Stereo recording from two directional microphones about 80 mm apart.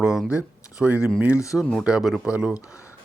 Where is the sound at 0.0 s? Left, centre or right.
Centre.